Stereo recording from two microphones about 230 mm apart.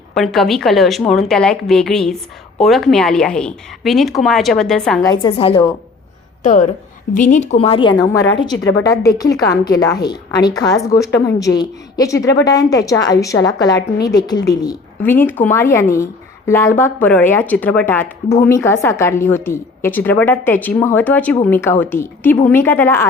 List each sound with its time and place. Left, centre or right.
0.1 s a woman's voice: centre
5.0 s a woman's voice: left
6.4 s a woman's voice: left; by 23.0 s centre